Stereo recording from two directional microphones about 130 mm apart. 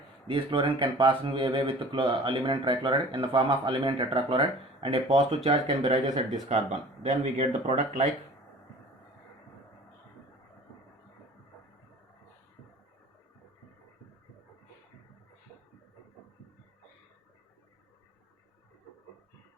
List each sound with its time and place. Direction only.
0.3 s speech: 45° right (ahead or behind); by 8.0 s 60° right (ahead or behind)